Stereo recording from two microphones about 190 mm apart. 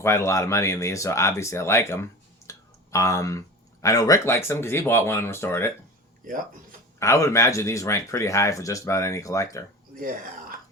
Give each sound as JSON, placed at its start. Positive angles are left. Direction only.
{"t": 0.0, "sound": "speech", "side_deg": 15}
{"t": 6.2, "sound": "speech", "side_deg": -45}
{"t": 7.0, "sound": "speech", "side_deg": 15}